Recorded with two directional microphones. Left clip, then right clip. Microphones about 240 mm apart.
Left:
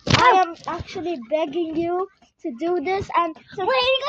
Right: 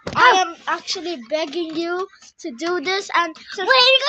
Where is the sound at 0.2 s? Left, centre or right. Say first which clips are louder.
Right 3 dB; centre.